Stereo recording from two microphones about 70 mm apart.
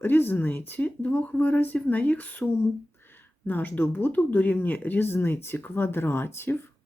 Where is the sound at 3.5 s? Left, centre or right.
Left.